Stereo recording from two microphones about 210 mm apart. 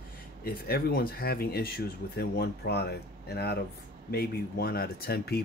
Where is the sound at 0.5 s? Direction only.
45° left (ahead or behind).